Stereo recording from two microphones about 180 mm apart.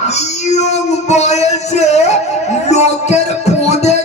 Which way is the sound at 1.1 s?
40° left (ahead or behind).